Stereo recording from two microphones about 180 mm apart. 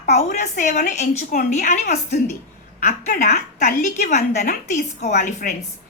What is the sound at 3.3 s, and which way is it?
A woman's voice, 40° left (ahead or behind).